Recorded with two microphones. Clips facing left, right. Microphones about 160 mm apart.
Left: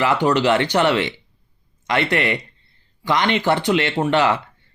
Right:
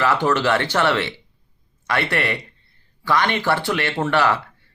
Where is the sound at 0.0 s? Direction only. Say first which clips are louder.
Left 2 dB; 15° left (ahead or behind).